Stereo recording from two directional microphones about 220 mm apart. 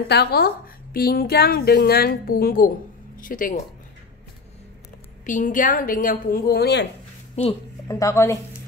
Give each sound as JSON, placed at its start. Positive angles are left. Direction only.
{"t": 0.1, "sound": "a woman's voice", "side_deg": 45}
{"t": 5.2, "sound": "a woman's voice", "side_deg": 35}
{"t": 7.4, "sound": "a woman's voice", "side_deg": 30}
{"t": 7.9, "sound": "speech", "side_deg": 15}